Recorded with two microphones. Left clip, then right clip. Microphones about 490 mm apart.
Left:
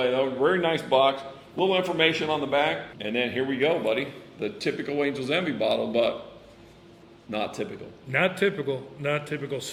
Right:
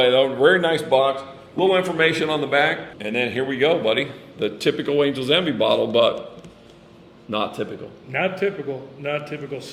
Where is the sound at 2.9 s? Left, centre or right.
Centre.